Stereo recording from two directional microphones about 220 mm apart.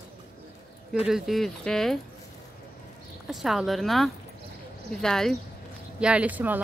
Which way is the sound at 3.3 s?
Centre (ahead or behind).